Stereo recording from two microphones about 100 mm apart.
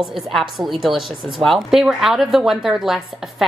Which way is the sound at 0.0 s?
Centre (ahead or behind).